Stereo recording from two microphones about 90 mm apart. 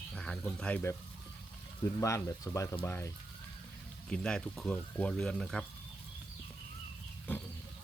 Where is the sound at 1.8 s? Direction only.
35° left (ahead or behind).